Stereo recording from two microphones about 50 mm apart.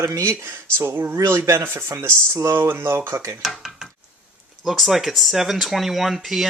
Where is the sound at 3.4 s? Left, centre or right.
Centre.